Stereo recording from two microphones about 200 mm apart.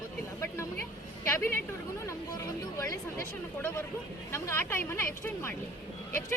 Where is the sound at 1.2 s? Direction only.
10° left (ahead or behind).